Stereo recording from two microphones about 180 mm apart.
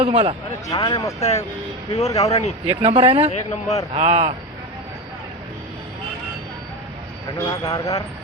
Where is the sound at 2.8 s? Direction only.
30° right (ahead or behind).